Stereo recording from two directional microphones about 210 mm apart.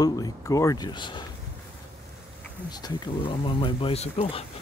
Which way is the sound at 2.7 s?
20° left (ahead or behind).